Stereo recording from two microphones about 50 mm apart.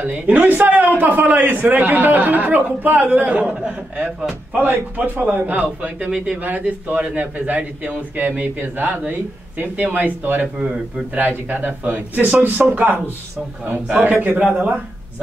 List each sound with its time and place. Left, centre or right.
0.0 s a man's voice: right
14.4 s speech: centre